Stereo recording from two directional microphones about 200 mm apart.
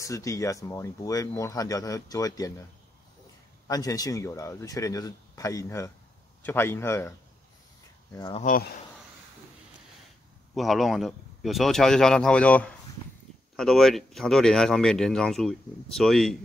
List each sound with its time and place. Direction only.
0.0 s speech: 15° left (ahead or behind)
3.6 s speech: 15° left (ahead or behind)
8.4 s speech: 40° left (ahead or behind)
10.5 s speech: centre (ahead or behind)